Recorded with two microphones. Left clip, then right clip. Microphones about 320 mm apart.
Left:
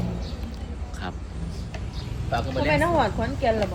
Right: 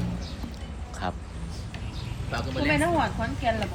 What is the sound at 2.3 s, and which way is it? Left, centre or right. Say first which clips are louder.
Speech: left 4 dB; centre.